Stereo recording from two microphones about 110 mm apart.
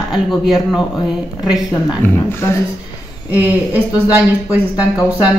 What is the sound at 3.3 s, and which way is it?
Speech, 15° right (ahead or behind).